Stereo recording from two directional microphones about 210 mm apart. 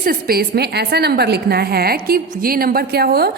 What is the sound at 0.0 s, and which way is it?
A woman's voice, 45° right (ahead or behind).